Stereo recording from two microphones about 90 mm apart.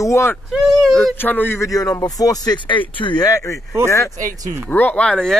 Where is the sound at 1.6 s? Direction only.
40° left (ahead or behind).